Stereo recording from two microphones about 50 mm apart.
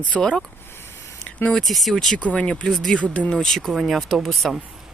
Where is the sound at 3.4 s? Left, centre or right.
Centre.